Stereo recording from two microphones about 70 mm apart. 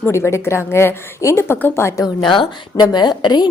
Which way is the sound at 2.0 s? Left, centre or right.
Left.